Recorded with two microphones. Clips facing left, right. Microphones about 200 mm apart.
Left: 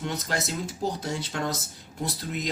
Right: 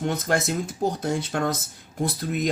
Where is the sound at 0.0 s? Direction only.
50° right (ahead or behind).